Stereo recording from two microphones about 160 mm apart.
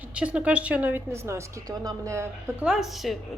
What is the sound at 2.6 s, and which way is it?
Speech, centre (ahead or behind).